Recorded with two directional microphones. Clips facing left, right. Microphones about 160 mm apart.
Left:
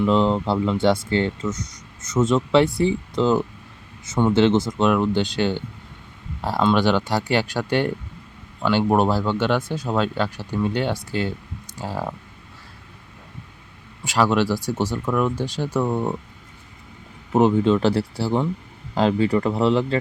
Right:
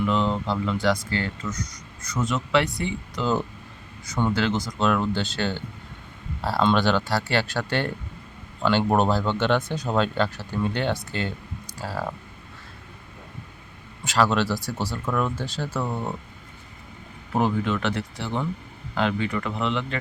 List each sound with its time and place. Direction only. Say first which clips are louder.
0.0 s speech: left 5 dB; 30° left (ahead or behind)
4.9 s speech: left 2 dB; 15° left (ahead or behind)
14.1 s speech: left 3 dB; 15° left (ahead or behind)
17.3 s speech: left 7 dB; 25° left (ahead or behind)